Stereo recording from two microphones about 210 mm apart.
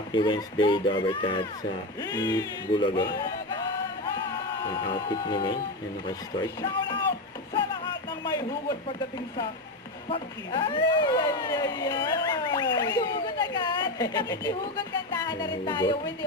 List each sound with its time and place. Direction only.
0.1 s speech: 20° left (ahead or behind)
10.1 s speech: 25° left (ahead or behind)